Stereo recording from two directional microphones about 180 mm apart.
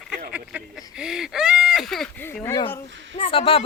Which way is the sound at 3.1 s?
30° left (ahead or behind).